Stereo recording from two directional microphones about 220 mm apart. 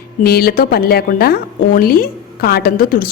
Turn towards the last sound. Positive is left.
turn(degrees=40)  # may be behind; listen again after turning